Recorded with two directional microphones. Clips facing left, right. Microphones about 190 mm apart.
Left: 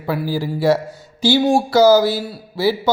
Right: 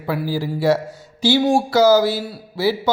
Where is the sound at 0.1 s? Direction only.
40° left (ahead or behind).